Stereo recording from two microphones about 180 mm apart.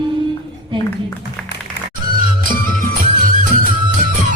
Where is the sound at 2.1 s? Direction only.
50° right (ahead or behind).